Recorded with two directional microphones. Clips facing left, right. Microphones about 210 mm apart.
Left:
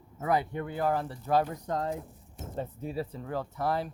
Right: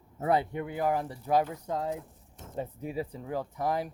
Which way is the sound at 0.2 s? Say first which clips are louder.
Right 1 dB; 30° right (ahead or behind).